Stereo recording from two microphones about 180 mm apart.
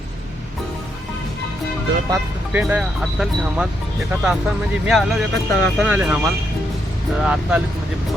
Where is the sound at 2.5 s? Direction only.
10° right (ahead or behind).